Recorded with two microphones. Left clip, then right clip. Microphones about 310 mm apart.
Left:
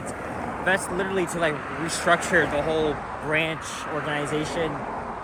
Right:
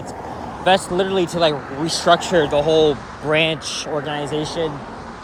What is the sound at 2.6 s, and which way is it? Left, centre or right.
Speech, right.